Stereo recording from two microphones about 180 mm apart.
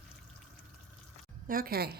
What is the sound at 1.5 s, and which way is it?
Speech, 55° right (ahead or behind).